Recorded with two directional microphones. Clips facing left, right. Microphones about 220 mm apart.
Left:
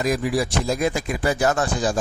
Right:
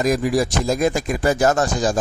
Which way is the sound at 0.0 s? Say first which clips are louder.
Right 3 dB; 45° right (ahead or behind).